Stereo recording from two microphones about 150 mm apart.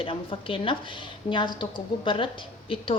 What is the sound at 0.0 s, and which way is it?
A woman's voice, 35° left (ahead or behind).